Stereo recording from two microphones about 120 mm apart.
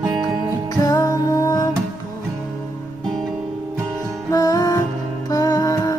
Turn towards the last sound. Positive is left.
turn(degrees=30)  # may be behind; listen again after turning